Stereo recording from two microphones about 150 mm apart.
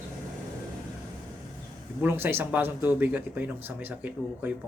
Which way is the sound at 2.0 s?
15° right (ahead or behind).